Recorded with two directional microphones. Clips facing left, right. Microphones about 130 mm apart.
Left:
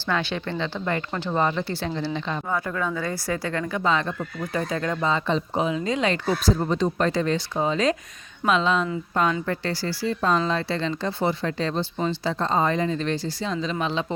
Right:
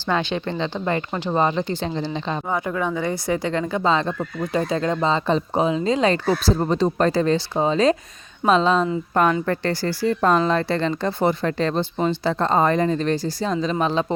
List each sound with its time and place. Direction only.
0.1 s speech: 20° right (ahead or behind); by 8.9 s 35° right (ahead or behind)
9.1 s speech: 55° right (ahead or behind)